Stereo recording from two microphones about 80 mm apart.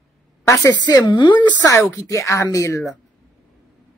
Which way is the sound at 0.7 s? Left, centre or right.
Left.